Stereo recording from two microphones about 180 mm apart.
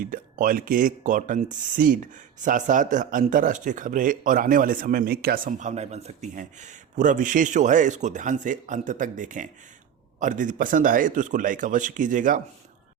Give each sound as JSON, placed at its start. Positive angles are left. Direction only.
{"t": 0.0, "sound": "speech", "side_deg": -50}